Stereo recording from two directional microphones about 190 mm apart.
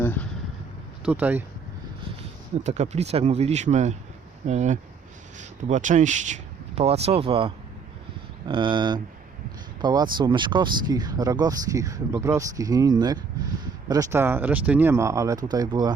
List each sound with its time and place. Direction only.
0.0 s a sound: 10° left (ahead or behind)
1.0 s speech: 10° right (ahead or behind)
2.6 s speech: 35° right (ahead or behind)